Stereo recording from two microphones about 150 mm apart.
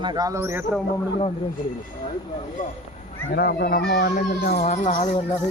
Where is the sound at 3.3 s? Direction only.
90° left.